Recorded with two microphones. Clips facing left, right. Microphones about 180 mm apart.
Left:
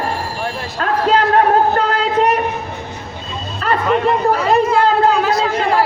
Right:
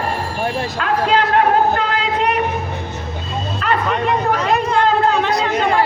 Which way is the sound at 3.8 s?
Centre (ahead or behind).